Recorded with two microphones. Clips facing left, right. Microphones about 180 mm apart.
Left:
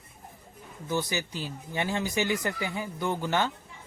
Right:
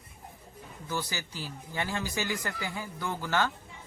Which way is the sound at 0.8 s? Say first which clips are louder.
Left 5 dB; 20° left (ahead or behind).